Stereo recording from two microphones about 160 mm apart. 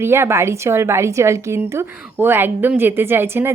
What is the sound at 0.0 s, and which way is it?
Speech, 15° right (ahead or behind).